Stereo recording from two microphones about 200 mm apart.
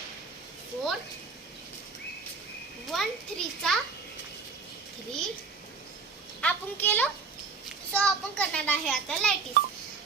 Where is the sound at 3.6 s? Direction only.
5° left (ahead or behind).